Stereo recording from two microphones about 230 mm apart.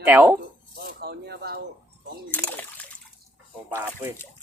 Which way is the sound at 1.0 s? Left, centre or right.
Right.